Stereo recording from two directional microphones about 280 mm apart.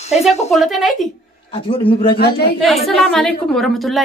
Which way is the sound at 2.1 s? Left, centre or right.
Left.